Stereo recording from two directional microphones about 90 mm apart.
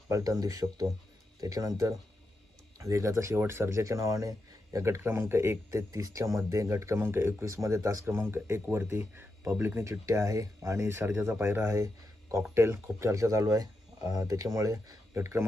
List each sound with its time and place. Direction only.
0.1 s speech: 40° right (ahead or behind)
8.1 s speech: 25° right (ahead or behind)